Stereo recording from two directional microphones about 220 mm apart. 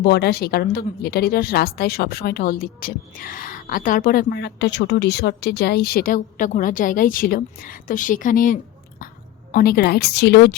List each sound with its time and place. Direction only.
0.0 s a woman's voice: 50° left (ahead or behind)